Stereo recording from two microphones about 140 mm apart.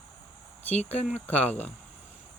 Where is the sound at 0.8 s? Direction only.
50° left (ahead or behind).